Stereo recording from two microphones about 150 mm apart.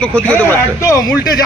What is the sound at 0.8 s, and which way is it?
Speech, 20° left (ahead or behind).